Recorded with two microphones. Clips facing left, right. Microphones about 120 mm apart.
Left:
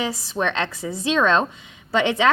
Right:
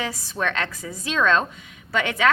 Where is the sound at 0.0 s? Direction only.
20° left (ahead or behind).